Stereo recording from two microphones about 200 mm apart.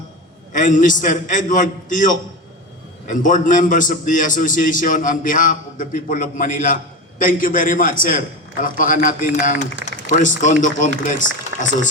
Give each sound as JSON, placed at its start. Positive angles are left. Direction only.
{"t": 0.5, "sound": "a man's voice", "side_deg": 40}